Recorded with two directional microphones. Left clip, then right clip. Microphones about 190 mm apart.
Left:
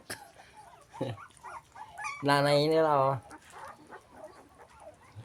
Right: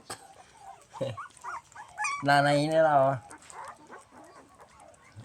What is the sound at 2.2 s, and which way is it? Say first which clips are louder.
Speech: right 1 dB; 10° left (ahead or behind).